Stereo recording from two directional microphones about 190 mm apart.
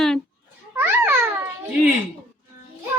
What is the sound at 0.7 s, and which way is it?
Babbling, 10° right (ahead or behind).